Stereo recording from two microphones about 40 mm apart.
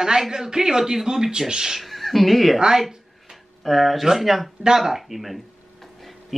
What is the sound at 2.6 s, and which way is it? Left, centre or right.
Speech, centre.